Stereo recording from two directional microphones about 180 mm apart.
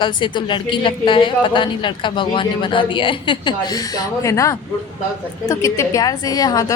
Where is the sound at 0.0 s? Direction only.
25° left (ahead or behind).